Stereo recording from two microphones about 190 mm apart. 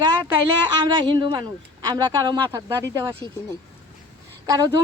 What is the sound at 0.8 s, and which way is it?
A woman's voice, 25° right (ahead or behind).